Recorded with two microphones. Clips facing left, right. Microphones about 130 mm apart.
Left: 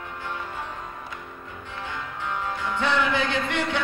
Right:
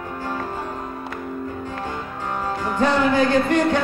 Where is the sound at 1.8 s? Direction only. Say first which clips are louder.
Right 4 dB; 40° right (ahead or behind).